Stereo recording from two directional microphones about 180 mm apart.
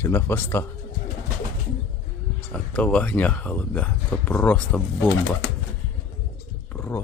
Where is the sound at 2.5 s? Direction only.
5° left (ahead or behind).